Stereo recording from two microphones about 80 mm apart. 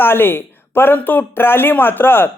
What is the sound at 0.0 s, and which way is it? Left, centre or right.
A man's voice, left.